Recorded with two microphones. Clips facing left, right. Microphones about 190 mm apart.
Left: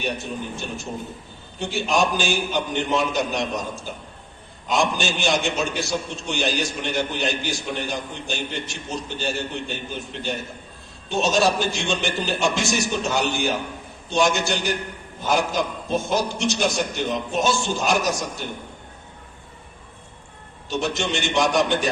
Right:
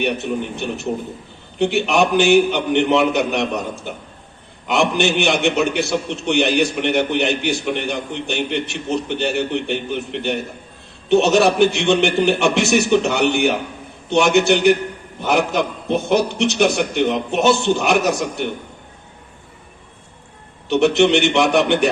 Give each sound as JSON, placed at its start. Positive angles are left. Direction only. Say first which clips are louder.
{"t": 0.0, "sound": "a man's voice", "louder": "right 7 dB", "side_deg": -65}
{"t": 20.7, "sound": "a man's voice", "louder": "right 11 dB", "side_deg": -65}